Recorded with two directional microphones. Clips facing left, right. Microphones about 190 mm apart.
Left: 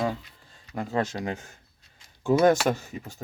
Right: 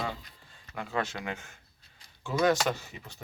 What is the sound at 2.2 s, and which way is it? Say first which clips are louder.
Speech: left 6 dB; 50° left (ahead or behind).